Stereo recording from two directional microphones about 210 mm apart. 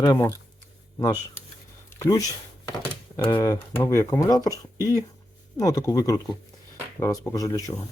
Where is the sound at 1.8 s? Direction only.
15° left (ahead or behind).